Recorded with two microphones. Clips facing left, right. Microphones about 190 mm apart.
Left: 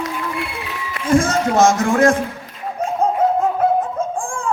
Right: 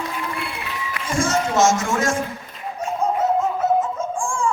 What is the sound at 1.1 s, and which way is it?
Speech, 55° left (ahead or behind).